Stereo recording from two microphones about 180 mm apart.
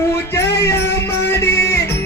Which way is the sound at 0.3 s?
15° left (ahead or behind).